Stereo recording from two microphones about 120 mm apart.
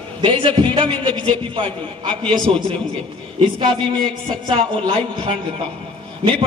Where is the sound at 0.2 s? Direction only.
45° right (ahead or behind).